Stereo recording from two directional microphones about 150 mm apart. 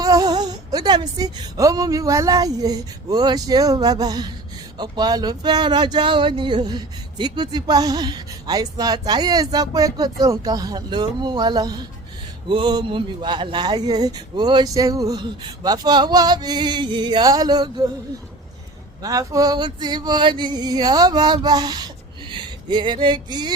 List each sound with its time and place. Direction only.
0.0 s speech: 25° right (ahead or behind)
19.0 s speech: 25° right (ahead or behind)